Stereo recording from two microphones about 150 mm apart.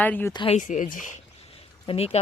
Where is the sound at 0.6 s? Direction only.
60° left (ahead or behind).